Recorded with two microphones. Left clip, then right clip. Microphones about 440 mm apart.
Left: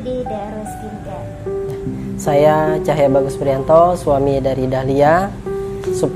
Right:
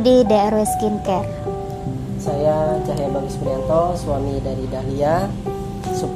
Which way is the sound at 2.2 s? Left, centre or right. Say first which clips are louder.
Left 6 dB; left.